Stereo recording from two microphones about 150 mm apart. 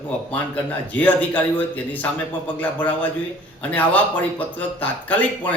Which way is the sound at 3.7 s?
10° left (ahead or behind).